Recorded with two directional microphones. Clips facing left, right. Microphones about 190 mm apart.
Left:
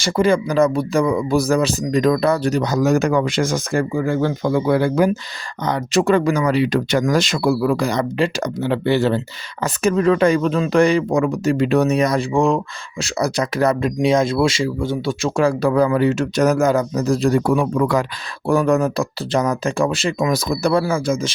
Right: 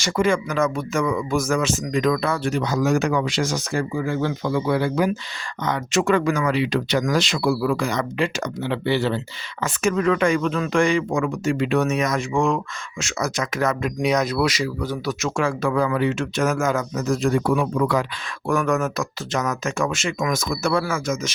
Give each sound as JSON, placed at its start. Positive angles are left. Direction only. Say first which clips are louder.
{"t": 0.0, "sound": "speech", "louder": "left 4 dB", "side_deg": 35}
{"t": 5.6, "sound": "speech", "louder": "left 4 dB", "side_deg": 35}
{"t": 18.4, "sound": "speech", "louder": "left 5 dB", "side_deg": 30}